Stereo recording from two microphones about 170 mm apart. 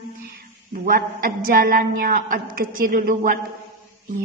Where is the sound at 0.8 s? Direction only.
60° right (ahead or behind).